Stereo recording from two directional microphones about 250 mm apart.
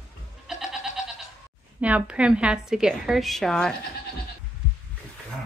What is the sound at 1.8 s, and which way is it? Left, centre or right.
Speech, centre.